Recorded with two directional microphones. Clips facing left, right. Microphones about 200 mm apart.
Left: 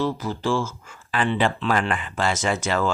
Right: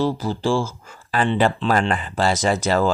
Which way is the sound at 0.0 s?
30° right (ahead or behind).